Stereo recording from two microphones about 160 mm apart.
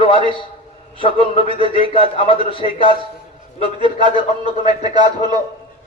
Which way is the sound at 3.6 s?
30° right (ahead or behind).